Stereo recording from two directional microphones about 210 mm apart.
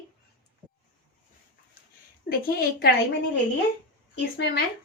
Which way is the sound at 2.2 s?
45° left (ahead or behind).